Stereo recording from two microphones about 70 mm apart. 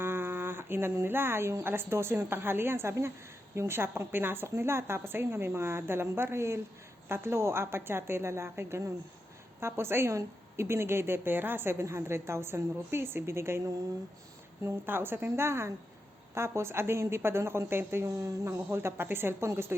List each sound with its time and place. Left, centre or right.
0.0 s a woman's voice: right